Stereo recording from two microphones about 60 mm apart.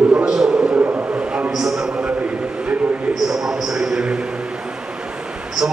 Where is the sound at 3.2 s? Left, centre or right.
Centre.